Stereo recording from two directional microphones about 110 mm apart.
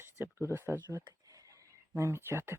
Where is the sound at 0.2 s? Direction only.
20° right (ahead or behind).